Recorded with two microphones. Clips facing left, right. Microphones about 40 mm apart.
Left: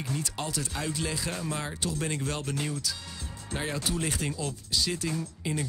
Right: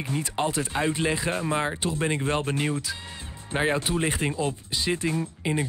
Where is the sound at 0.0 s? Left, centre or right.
Right.